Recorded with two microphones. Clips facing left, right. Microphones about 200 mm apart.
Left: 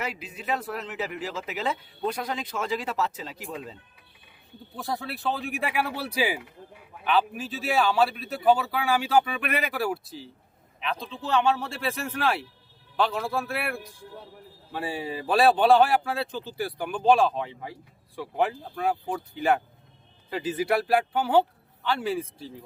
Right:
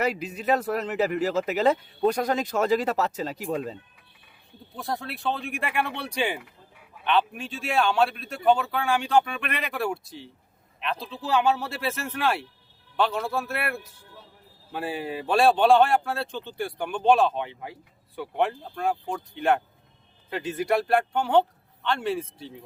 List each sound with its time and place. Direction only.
0.0 s a man's voice: 40° right (ahead or behind)
4.7 s speech: centre (ahead or behind)